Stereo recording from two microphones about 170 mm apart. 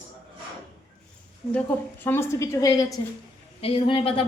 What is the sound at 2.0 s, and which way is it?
Speech, 15° left (ahead or behind).